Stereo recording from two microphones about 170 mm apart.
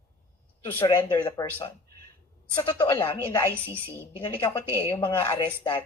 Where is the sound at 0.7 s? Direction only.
15° left (ahead or behind).